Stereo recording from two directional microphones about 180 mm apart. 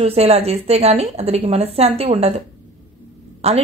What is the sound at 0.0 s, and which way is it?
A woman's voice, 35° right (ahead or behind).